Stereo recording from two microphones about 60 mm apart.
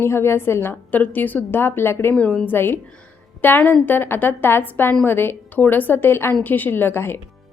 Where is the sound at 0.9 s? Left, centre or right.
Left.